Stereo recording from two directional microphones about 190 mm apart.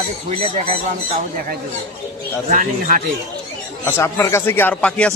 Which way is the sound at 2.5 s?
45° right (ahead or behind).